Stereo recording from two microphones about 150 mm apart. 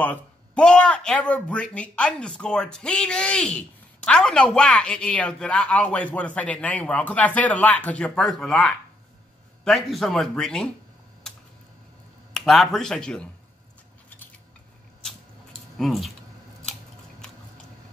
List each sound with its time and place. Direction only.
0.0 s speech: 10° left (ahead or behind)
11.3 s a sound: 5° left (ahead or behind)
12.4 s speech: centre (ahead or behind)
15.8 s speech: centre (ahead or behind)